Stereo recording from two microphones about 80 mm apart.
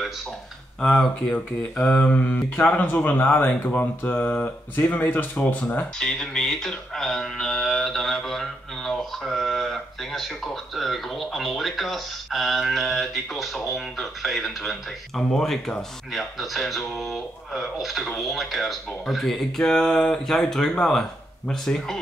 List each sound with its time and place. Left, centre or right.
0.7 s speech: centre
5.9 s mantra: centre
20.7 s speech: centre